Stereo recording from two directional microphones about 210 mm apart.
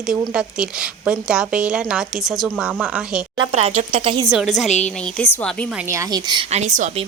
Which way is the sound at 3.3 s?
30° right (ahead or behind).